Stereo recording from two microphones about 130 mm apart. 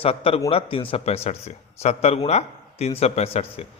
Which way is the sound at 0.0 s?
50° left (ahead or behind).